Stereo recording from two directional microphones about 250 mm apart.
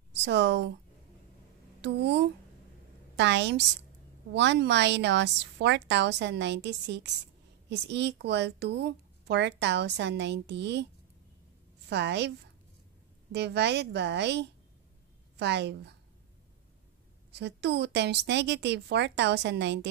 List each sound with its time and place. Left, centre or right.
0.2 s speech: right
1.8 s speech: right
11.9 s speech: right
13.3 s a woman's voice: right
17.3 s speech: right